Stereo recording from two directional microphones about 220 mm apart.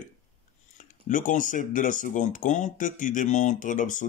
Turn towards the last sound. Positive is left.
turn(degrees=35)  # may be behind; listen again after turning